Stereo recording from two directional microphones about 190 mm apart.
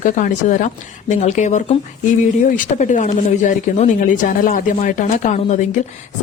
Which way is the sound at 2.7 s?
40° left (ahead or behind).